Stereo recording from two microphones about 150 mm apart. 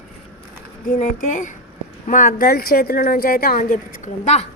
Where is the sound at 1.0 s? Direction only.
55° left (ahead or behind).